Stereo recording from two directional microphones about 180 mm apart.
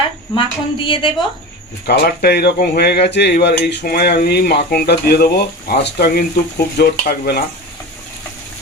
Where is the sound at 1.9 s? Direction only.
60° left (ahead or behind).